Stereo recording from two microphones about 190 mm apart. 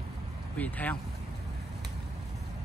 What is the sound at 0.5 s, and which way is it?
Speech, 10° left (ahead or behind).